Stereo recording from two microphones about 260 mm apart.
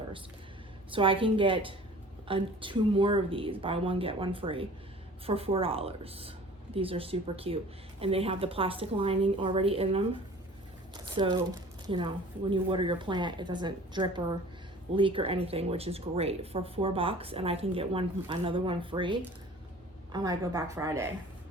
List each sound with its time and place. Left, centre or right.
0.9 s speech: centre
10.9 s a sound: centre
11.9 s speech: centre